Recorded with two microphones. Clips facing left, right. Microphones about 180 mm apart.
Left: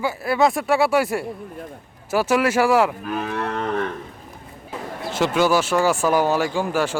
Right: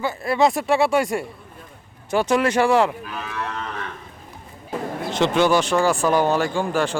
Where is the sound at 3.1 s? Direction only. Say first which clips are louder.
Left 5 dB; 50° left (ahead or behind).